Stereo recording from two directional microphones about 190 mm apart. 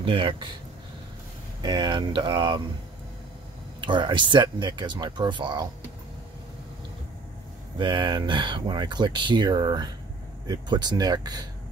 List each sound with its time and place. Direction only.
0.0 s speech: 25° right (ahead or behind)
1.6 s speech: 25° right (ahead or behind)
3.8 s speech: 25° right (ahead or behind)
7.8 s speech: 25° right (ahead or behind)